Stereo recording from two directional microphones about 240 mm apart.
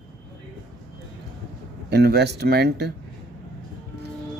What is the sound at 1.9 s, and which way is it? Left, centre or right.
Speech, right.